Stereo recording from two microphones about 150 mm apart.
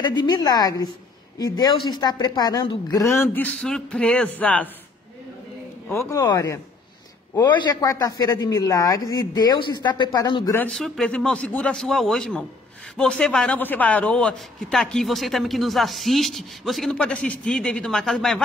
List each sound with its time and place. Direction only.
0.0 s a woman's voice: 30° left (ahead or behind)
3.3 s speech: 5° left (ahead or behind)
5.9 s a woman's voice: 20° left (ahead or behind)
10.7 s a man's voice: 5° left (ahead or behind)